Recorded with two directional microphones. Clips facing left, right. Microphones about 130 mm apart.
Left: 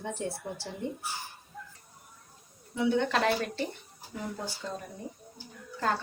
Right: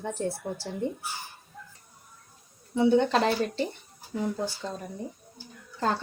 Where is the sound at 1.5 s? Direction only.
Centre (ahead or behind).